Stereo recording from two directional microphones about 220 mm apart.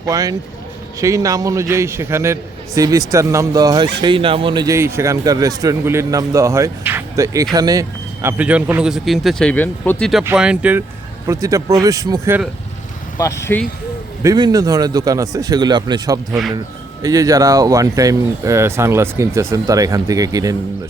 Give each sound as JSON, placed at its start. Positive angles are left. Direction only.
{"t": 0.0, "sound": "a man's voice", "side_deg": -15}
{"t": 13.1, "sound": "speech", "side_deg": 15}
{"t": 14.2, "sound": "a man's voice", "side_deg": -15}